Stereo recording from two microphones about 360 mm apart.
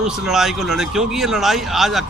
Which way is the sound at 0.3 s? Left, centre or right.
Centre.